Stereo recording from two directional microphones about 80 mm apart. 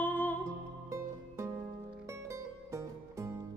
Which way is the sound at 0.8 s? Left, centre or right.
Right.